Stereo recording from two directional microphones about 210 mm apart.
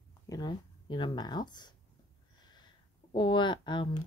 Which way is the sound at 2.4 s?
20° left (ahead or behind).